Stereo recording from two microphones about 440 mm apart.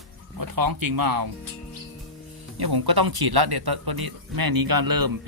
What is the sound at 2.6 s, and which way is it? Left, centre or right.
Speech, right.